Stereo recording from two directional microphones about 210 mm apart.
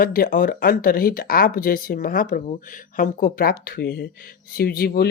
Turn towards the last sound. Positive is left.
turn(degrees=50)  # may be behind; listen again after turning